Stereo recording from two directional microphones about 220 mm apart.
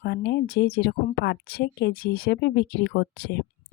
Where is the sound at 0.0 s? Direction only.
50° left (ahead or behind).